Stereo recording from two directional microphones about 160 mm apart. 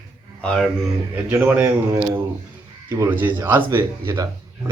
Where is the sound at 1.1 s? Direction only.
10° right (ahead or behind).